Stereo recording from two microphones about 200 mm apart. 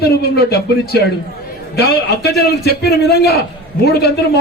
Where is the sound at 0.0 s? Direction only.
50° left (ahead or behind).